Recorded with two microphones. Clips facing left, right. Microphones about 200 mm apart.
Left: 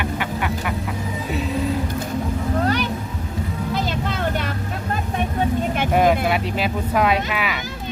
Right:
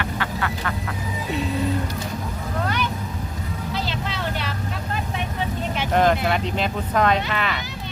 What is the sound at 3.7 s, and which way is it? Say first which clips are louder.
Vehicle: left 3 dB; 50° left (ahead or behind).